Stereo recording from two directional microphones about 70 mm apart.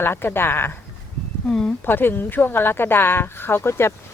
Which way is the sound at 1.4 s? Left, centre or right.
Centre.